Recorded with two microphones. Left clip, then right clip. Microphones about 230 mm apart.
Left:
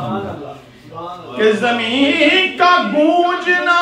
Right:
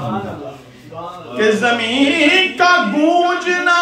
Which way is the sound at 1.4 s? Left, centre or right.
Right.